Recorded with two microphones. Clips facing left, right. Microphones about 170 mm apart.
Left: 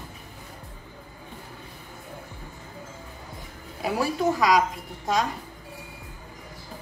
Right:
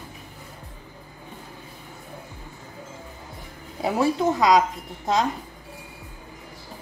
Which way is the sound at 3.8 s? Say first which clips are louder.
Right 3 dB; 25° right (ahead or behind).